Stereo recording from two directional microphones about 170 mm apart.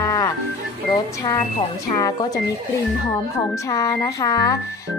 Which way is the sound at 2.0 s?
20° left (ahead or behind).